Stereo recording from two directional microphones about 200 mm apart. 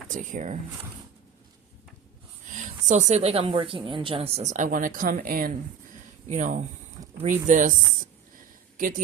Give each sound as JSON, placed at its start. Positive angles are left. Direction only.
{"t": 0.1, "sound": "a woman's voice", "side_deg": -40}
{"t": 2.5, "sound": "a woman's voice", "side_deg": -40}